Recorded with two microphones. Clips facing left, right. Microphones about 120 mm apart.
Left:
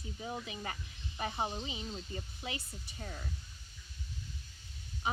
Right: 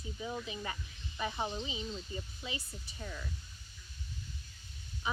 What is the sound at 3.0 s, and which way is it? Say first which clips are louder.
Speech: right 1 dB; 45° left (ahead or behind).